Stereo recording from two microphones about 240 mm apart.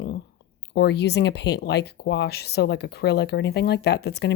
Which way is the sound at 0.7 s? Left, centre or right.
Left.